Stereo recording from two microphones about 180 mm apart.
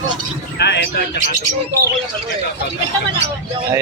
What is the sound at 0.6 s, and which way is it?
Speech, 70° left (ahead or behind).